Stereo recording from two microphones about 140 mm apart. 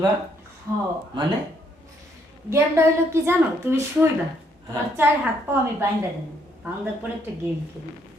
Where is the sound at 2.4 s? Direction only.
20° right (ahead or behind).